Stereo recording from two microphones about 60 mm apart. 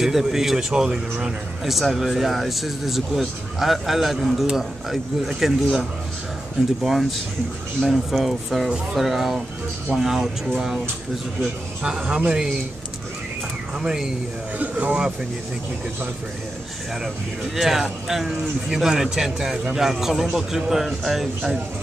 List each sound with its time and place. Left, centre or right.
0.0 s speech: centre
6.8 s speech: centre
11.8 s speech: centre
13.7 s speech: centre
14.6 s speech: right
17.0 s speech: centre